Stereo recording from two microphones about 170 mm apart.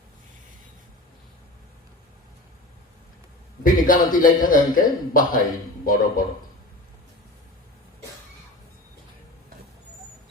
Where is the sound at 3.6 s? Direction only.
55° left (ahead or behind).